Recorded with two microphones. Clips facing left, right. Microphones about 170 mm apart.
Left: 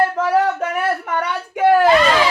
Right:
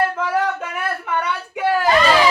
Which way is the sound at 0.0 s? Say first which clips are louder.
Left 4 dB; 35° left (ahead or behind).